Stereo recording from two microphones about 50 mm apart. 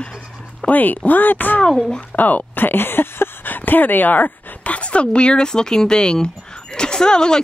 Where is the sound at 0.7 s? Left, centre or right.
Left.